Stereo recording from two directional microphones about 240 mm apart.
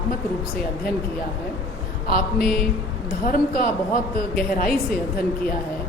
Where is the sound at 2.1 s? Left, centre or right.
Left.